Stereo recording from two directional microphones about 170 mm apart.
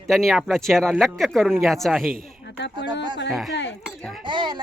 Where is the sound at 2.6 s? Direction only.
90° left.